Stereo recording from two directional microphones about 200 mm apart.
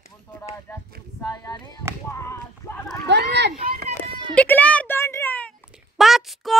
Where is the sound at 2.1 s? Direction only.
15° left (ahead or behind).